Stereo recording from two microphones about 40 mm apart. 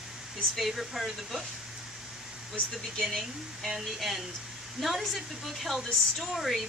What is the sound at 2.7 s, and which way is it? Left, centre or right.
A woman's voice, centre.